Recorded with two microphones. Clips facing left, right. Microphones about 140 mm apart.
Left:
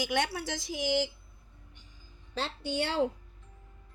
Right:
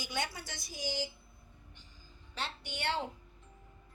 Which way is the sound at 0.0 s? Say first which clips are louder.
Left 8 dB; 90° left.